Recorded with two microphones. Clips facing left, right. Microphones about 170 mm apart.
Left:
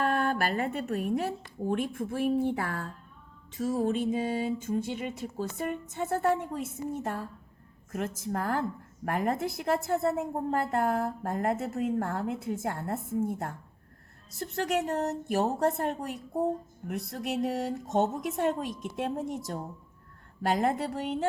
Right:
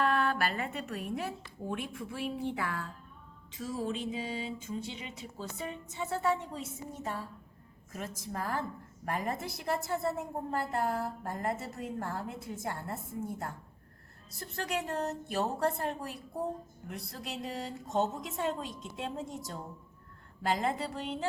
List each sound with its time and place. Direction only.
0.0 s music: 45° left (ahead or behind)
7.9 s a woman's voice: 55° left (ahead or behind)
14.3 s music: 50° left (ahead or behind)
20.5 s music: 55° left (ahead or behind)